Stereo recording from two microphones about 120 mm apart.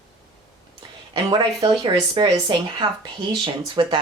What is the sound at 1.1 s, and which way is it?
Speech, 50° right (ahead or behind).